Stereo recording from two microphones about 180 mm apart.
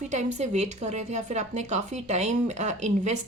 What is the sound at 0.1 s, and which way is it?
Speech, 40° right (ahead or behind).